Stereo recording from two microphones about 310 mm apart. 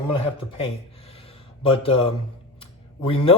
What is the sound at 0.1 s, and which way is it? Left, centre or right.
A man's voice, centre.